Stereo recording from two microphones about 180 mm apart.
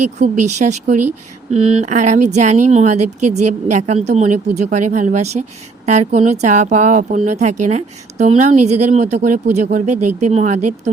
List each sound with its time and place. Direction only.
0.2 s speech: 40° right (ahead or behind)